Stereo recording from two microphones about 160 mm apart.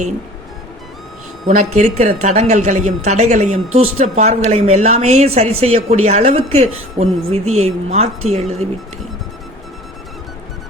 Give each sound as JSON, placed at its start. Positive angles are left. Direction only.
{"t": 1.5, "sound": "a woman's voice", "side_deg": -50}